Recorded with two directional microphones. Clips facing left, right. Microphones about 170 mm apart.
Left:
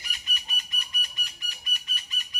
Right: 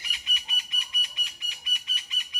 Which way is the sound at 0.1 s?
45° left (ahead or behind).